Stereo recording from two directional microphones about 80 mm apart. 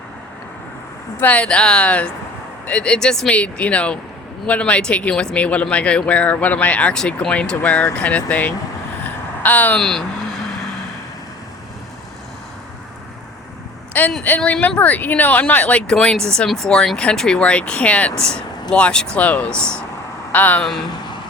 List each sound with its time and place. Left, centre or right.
1.2 s speech: centre
9.7 s speech: centre
14.3 s speech: centre
15.9 s speech: centre